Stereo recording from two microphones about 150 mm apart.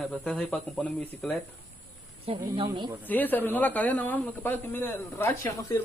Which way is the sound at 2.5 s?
30° right (ahead or behind).